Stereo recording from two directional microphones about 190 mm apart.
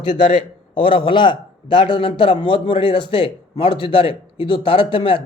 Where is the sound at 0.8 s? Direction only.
25° left (ahead or behind).